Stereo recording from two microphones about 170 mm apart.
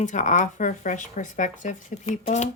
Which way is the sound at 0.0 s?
45° left (ahead or behind).